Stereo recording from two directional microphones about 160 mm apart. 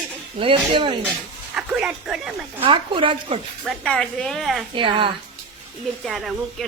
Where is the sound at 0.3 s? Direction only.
35° right (ahead or behind).